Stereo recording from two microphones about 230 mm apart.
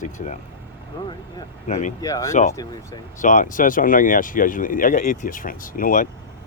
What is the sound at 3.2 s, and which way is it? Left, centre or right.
Speech, left.